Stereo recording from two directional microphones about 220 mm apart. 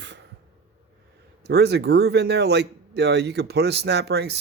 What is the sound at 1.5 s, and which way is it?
Speech, 50° right (ahead or behind).